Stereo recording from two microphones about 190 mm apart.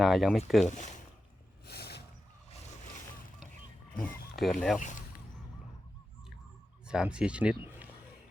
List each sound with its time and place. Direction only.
0.0 s speech: centre (ahead or behind)
0.7 s a sound: 40° left (ahead or behind)
1.6 s a sound: 60° left (ahead or behind)
4.0 s speech: centre (ahead or behind)
4.8 s speech: 40° left (ahead or behind)
6.8 s speech: 5° right (ahead or behind)